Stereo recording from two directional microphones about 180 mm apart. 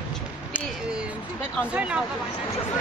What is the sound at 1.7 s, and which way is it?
Speech, 5° right (ahead or behind).